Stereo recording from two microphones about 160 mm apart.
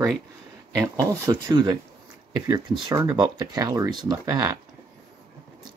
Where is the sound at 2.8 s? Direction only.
20° right (ahead or behind).